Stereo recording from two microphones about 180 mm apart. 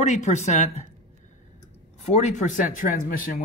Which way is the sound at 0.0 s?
40° left (ahead or behind).